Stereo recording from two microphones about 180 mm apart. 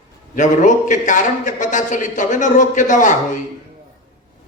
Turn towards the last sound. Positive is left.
turn(degrees=45)  # may be behind; listen again after turning